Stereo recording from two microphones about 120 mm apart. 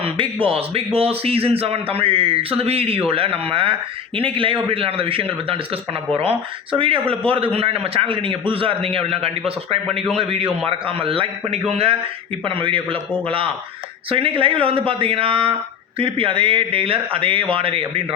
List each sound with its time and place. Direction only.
0.0 s speech: 45° right (ahead or behind)
9.8 s a man's voice: centre (ahead or behind)
10.2 s a man's voice: 55° right (ahead or behind)
12.5 s speech: 45° right (ahead or behind)